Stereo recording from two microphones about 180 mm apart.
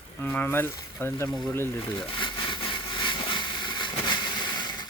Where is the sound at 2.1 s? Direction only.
25° left (ahead or behind).